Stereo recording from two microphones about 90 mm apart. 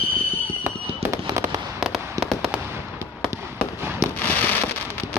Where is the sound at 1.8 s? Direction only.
Centre (ahead or behind).